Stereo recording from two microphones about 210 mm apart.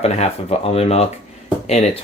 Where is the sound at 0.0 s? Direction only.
30° left (ahead or behind).